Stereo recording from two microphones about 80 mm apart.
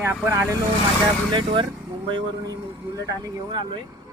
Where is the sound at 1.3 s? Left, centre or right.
Right.